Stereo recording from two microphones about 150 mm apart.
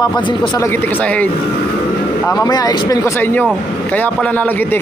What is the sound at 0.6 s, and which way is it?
Speech, 15° left (ahead or behind).